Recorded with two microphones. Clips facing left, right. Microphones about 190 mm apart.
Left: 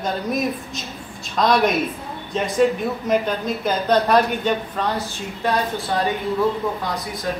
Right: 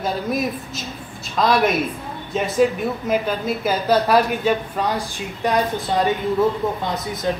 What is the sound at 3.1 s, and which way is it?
A woman's voice, 5° right (ahead or behind).